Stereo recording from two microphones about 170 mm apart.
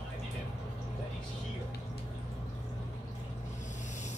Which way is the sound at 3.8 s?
45° left (ahead or behind).